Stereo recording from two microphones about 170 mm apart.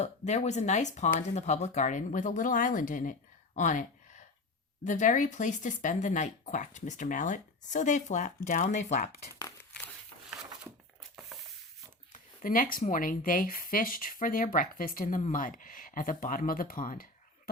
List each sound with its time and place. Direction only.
0.0 s speech: 45° left (ahead or behind)
12.1 s speech: 55° left (ahead or behind)